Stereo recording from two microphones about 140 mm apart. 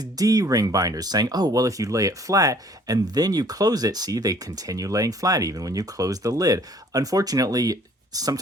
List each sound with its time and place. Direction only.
0.0 s speech: 25° right (ahead or behind)